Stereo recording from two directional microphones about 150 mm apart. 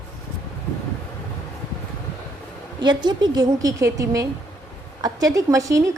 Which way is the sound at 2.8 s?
30° right (ahead or behind).